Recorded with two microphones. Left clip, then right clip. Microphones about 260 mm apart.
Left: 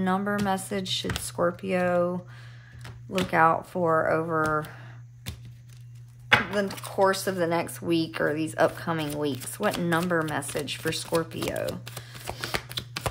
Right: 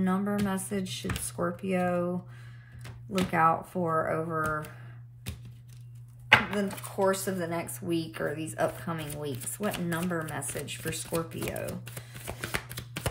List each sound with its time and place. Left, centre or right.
0.0 s speech: centre
6.5 s speech: left